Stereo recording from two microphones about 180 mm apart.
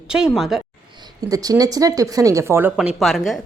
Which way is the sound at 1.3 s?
20° right (ahead or behind).